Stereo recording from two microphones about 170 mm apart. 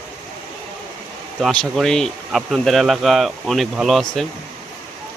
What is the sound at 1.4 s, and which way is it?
Speech, centre (ahead or behind).